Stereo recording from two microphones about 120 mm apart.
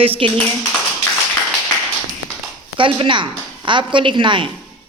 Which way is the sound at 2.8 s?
45° right (ahead or behind).